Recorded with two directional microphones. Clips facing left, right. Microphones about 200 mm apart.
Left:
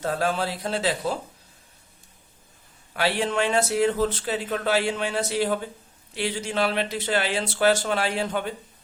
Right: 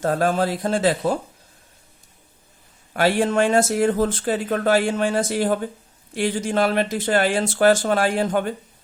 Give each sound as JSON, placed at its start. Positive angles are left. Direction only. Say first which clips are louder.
{"t": 0.0, "sound": "speech", "louder": "right 5 dB", "side_deg": -50}
{"t": 2.9, "sound": "speech", "louder": "right 6 dB", "side_deg": -45}